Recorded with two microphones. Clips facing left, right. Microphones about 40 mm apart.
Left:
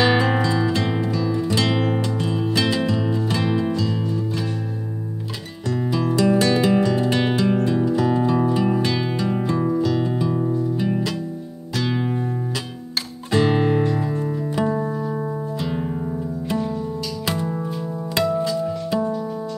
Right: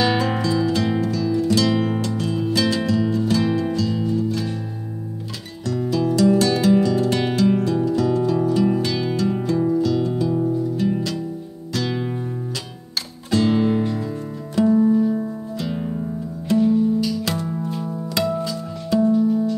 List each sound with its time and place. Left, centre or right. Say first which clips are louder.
0.0 s music: left 2 dB; centre
5.7 s music: right 1 dB; centre
13.3 s music: even; left
15.6 s music: right 2 dB; centre
17.3 s music: left 1 dB; centre
17.6 s music: right 1 dB; centre